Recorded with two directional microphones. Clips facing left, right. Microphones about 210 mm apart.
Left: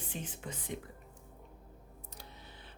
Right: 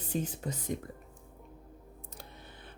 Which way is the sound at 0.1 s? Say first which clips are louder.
Right 11 dB; 40° right (ahead or behind).